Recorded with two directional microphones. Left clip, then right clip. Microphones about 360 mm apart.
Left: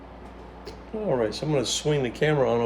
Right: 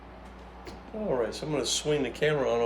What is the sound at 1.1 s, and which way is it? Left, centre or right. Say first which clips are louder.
Speech: left 4 dB; left.